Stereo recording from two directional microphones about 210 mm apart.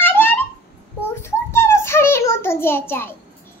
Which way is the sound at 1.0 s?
10° left (ahead or behind).